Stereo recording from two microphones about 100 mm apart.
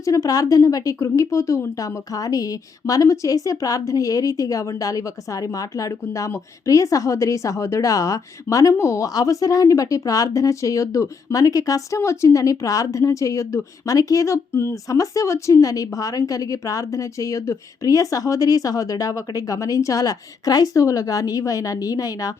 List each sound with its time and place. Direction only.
0.0 s speech: 35° left (ahead or behind)